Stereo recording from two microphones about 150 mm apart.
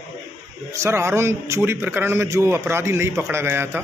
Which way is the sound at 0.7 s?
15° right (ahead or behind).